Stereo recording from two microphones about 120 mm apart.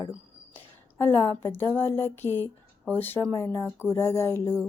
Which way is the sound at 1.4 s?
20° left (ahead or behind).